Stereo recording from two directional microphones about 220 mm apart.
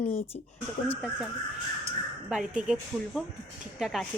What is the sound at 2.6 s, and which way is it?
Speech, 5° right (ahead or behind).